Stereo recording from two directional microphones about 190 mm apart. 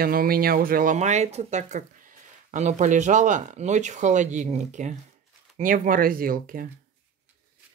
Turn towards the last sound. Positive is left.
turn(degrees=-50)  # may be behind; listen again after turning